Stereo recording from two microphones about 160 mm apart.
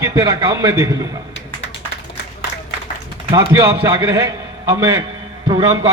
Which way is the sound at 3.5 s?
20° right (ahead or behind).